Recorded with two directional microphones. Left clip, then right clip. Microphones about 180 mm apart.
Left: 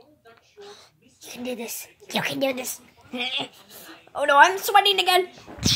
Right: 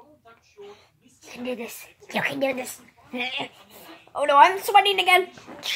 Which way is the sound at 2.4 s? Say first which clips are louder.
Even; 20° left (ahead or behind).